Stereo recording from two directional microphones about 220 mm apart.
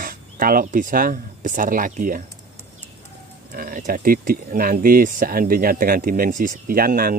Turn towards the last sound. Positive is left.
turn(degrees=-40)  # may be behind; listen again after turning